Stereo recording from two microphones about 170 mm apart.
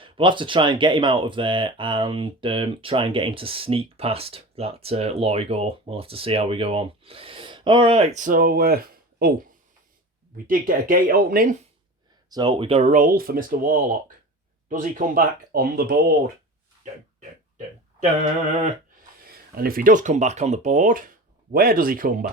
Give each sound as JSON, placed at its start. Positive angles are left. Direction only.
{"t": 0.0, "sound": "speech", "side_deg": -30}
{"t": 10.3, "sound": "speech", "side_deg": -55}
{"t": 12.3, "sound": "speech", "side_deg": -25}
{"t": 12.9, "sound": "speech", "side_deg": -55}
{"t": 19.3, "sound": "speech", "side_deg": -60}